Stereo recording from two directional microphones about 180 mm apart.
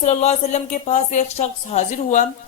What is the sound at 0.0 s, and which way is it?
A woman's voice, 40° left (ahead or behind).